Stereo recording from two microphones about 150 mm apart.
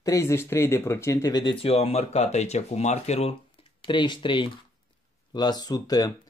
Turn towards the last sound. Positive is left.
turn(degrees=25)  # may be behind; listen again after turning